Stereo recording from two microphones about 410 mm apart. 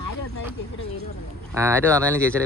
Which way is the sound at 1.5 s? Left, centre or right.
Centre.